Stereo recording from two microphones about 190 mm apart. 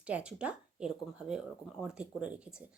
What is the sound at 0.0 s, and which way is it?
Speech, 5° right (ahead or behind).